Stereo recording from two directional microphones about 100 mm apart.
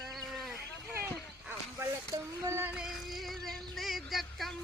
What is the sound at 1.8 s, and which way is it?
Speech, 30° right (ahead or behind).